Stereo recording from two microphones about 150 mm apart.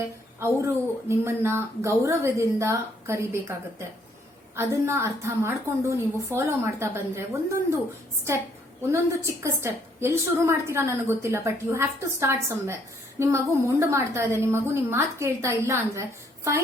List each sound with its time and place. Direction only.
0.3 s a woman's voice: 15° right (ahead or behind)
9.4 s a woman's voice: 15° right (ahead or behind)